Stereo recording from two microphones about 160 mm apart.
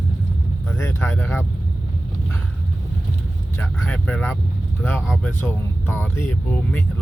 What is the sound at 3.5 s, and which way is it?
Speech, 10° left (ahead or behind).